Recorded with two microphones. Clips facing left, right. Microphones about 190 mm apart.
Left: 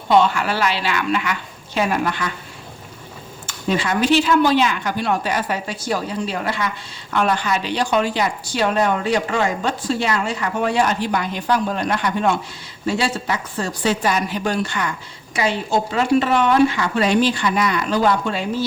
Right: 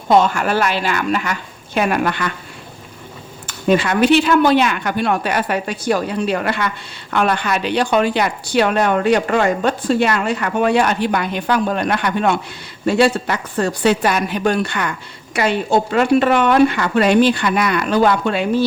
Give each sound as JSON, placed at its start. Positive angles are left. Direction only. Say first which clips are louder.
{"t": 0.1, "sound": "a woman's voice", "louder": "right 2 dB", "side_deg": -45}
{"t": 3.4, "sound": "speech", "louder": "right 6 dB", "side_deg": -60}